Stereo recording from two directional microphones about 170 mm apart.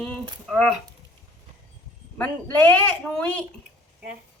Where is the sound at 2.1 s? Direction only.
10° left (ahead or behind).